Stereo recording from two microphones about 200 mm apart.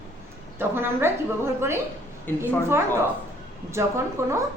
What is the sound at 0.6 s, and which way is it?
Speech, 10° right (ahead or behind).